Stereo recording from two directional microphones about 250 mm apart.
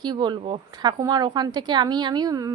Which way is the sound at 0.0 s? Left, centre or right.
Centre.